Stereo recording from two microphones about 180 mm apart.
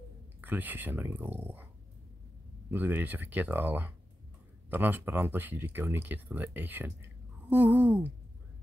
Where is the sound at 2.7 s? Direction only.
10° right (ahead or behind).